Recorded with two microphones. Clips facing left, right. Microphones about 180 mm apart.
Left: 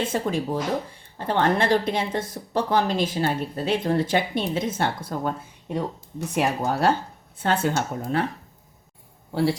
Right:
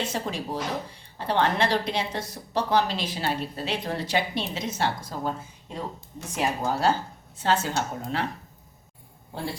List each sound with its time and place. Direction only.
0.0 s a woman's voice: 55° left (ahead or behind)
9.3 s a woman's voice: 80° left